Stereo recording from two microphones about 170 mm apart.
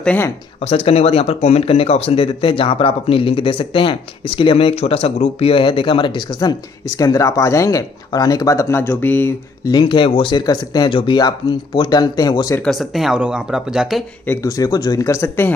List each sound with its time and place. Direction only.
0.0 s speech: 10° left (ahead or behind)
0.6 s speech: 35° left (ahead or behind); by 9.3 s 10° left (ahead or behind)
9.7 s speech: 25° left (ahead or behind)
12.5 s speech: centre (ahead or behind)
14.2 s speech: 15° left (ahead or behind)